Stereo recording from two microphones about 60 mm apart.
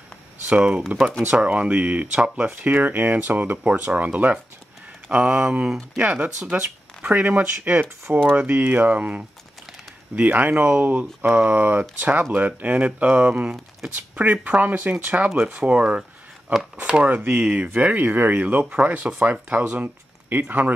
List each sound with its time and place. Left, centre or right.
0.5 s speech: centre
2.5 s speech: right
5.1 s speech: centre
5.9 s speech: right
7.7 s speech: right
8.3 s speech: right
17.1 s speech: right